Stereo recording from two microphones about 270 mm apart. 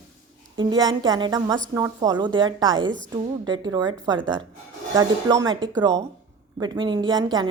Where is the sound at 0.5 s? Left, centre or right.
Centre.